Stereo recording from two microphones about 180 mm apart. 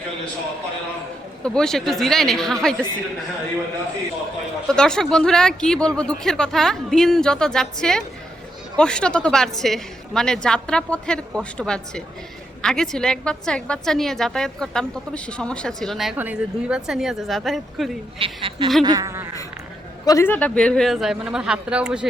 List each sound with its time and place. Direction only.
1.5 s a woman's voice: 5° left (ahead or behind)
4.7 s a woman's voice: 5° left (ahead or behind)
18.2 s a woman's voice: 30° right (ahead or behind)
18.9 s a sound: 20° right (ahead or behind)
20.1 s a woman's voice: 15° left (ahead or behind); by 22.0 s 5° right (ahead or behind)